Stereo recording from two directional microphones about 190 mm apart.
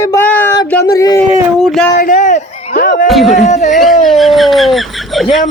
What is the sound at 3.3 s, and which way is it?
Speech, 35° left (ahead or behind).